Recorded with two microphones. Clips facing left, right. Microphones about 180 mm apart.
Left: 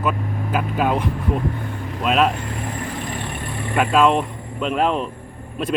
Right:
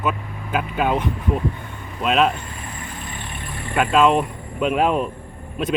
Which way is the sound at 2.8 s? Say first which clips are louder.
Left 7 dB; 90° left.